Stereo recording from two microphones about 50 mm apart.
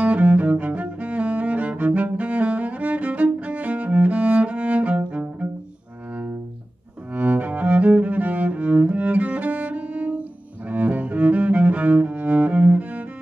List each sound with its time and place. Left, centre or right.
0.0 s cello: right
7.1 s cello: right